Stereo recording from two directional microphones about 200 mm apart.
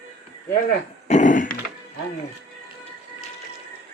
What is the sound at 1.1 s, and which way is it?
Thunk, 40° left (ahead or behind).